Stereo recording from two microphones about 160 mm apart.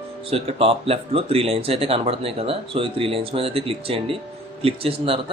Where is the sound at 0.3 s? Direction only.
35° right (ahead or behind).